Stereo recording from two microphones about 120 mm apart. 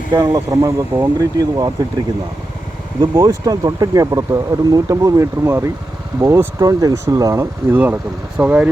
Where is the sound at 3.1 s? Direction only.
30° right (ahead or behind).